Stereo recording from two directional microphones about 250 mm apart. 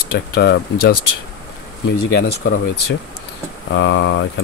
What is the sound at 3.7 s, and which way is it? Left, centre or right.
Speech, left.